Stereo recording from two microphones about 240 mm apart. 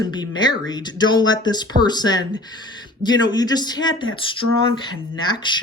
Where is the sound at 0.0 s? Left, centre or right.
Centre.